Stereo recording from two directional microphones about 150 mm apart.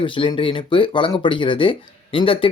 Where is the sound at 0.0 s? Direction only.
35° left (ahead or behind).